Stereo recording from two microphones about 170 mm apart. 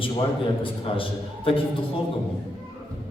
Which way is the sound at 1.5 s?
30° left (ahead or behind).